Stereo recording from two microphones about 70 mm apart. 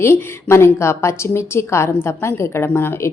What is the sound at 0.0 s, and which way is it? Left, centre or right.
A woman's voice, left.